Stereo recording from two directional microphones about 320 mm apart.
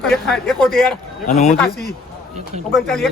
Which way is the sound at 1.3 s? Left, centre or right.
Left.